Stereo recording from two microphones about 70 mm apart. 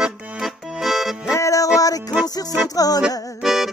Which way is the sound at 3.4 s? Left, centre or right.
Centre.